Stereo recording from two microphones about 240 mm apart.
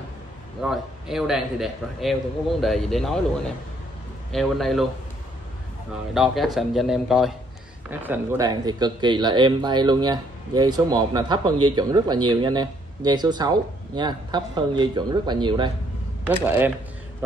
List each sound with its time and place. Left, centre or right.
0.6 s a man's voice: centre
4.3 s a man's voice: centre
6.1 s a man's voice: centre
16.3 s speech: centre